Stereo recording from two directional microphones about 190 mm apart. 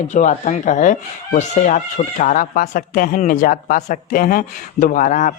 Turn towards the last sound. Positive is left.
turn(degrees=40)  # may be behind; listen again after turning